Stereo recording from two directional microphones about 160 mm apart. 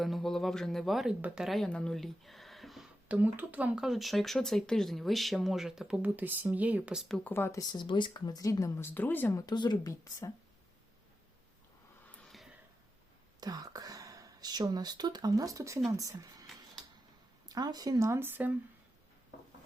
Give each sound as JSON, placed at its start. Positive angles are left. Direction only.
{"t": 0.0, "sound": "speech", "side_deg": 0}
{"t": 7.3, "sound": "speech", "side_deg": 15}
{"t": 9.5, "sound": "speech", "side_deg": 25}
{"t": 12.1, "sound": "a sound", "side_deg": 0}
{"t": 13.4, "sound": "speech", "side_deg": -25}
{"t": 17.5, "sound": "speech", "side_deg": -25}